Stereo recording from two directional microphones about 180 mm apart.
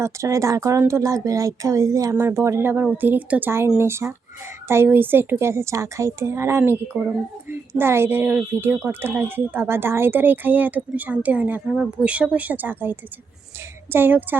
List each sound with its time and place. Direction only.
0.0 s speech: 15° right (ahead or behind)